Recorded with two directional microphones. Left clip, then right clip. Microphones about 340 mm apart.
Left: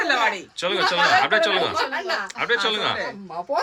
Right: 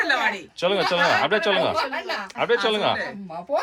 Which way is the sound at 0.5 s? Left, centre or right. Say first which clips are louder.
Even; centre.